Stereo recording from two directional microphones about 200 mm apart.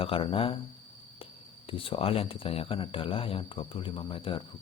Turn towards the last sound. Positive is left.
turn(degrees=25)  # may be behind; listen again after turning